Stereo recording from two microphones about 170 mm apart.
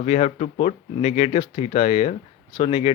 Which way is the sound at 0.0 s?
40° left (ahead or behind).